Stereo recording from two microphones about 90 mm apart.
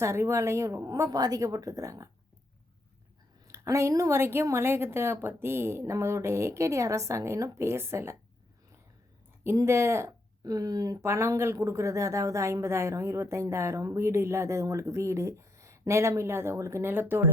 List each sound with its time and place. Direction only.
0.0 s speech: 30° right (ahead or behind)
3.4 s a woman's voice: 35° right (ahead or behind)
9.4 s speech: 30° right (ahead or behind)
10.4 s speech: 40° right (ahead or behind)
11.0 s speech: 30° right (ahead or behind)